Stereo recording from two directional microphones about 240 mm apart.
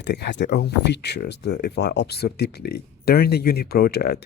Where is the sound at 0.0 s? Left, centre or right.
Left.